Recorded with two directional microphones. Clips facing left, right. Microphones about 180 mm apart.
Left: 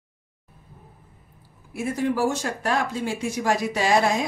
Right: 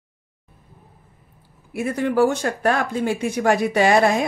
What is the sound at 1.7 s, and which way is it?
Speech, 60° right (ahead or behind).